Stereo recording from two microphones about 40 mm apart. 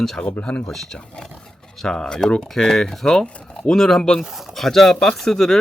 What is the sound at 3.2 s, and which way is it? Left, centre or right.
Speech, left.